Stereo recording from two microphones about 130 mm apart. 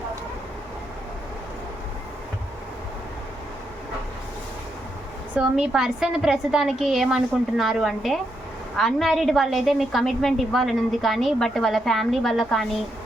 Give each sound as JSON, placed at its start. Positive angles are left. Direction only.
{"t": 5.3, "sound": "a woman's voice", "side_deg": -10}